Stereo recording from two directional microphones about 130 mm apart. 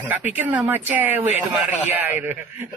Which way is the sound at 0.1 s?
15° right (ahead or behind).